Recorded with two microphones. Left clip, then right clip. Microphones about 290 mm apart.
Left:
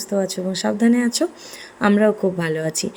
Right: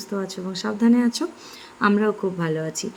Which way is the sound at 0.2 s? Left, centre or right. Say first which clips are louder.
Left 8 dB; centre.